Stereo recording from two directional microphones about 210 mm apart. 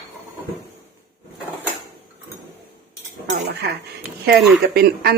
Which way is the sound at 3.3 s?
50° right (ahead or behind).